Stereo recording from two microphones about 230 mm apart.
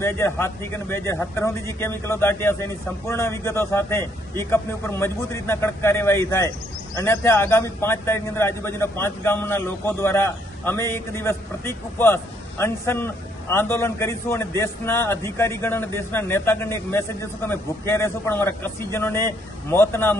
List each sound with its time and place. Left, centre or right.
0.0 s a man's voice: centre